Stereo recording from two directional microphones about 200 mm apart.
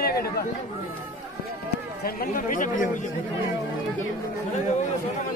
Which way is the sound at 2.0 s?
45° left (ahead or behind).